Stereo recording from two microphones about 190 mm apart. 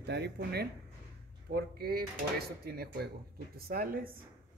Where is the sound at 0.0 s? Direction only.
60° right (ahead or behind).